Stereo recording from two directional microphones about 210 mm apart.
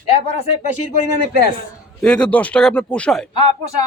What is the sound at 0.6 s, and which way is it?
Speech, 40° left (ahead or behind).